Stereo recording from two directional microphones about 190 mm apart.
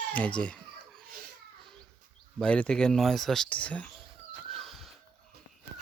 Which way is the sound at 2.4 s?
5° left (ahead or behind).